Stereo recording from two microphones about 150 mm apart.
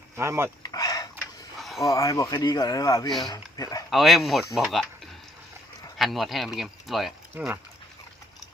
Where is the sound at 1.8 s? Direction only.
20° left (ahead or behind).